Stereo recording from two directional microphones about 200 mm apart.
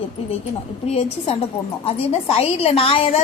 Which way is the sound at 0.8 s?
30° left (ahead or behind).